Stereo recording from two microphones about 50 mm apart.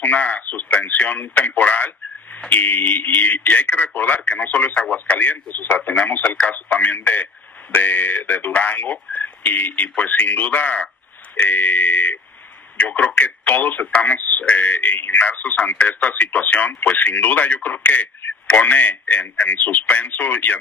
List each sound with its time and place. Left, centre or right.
0.0 s radio: left
0.8 s speech: left